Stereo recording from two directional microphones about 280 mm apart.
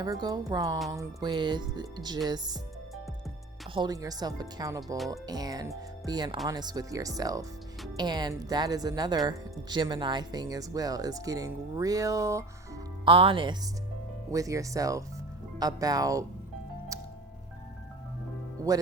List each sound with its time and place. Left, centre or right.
0.0 s speech: centre
3.8 s speech: centre
18.7 s speech: centre